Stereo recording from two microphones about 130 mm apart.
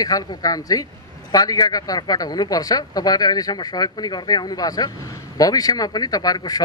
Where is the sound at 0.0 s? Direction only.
30° left (ahead or behind).